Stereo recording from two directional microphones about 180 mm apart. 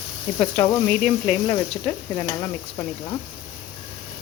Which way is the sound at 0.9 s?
5° left (ahead or behind).